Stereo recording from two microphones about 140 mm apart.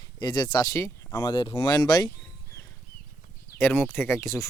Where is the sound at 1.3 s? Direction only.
35° left (ahead or behind).